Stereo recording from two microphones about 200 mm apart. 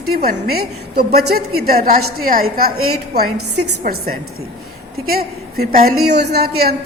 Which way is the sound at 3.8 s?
50° right (ahead or behind).